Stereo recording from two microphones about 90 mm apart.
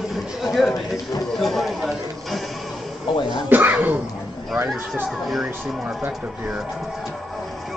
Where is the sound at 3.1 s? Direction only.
65° left (ahead or behind).